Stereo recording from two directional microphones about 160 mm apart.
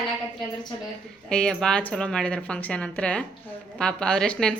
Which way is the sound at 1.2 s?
5° left (ahead or behind).